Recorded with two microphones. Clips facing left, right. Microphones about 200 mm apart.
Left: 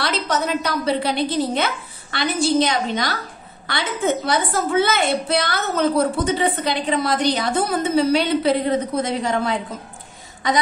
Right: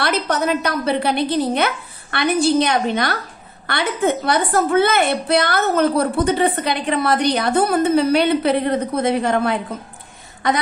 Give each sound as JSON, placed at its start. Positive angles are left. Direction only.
{"t": 0.0, "sound": "a woman's voice", "side_deg": -60}